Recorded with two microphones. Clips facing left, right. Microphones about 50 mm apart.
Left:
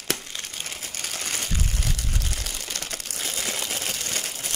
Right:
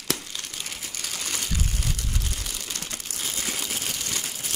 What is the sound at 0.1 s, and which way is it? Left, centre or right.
Crumpling, left.